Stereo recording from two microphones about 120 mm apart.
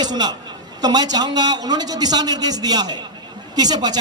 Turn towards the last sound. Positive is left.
turn(degrees=-35)  # may be behind; listen again after turning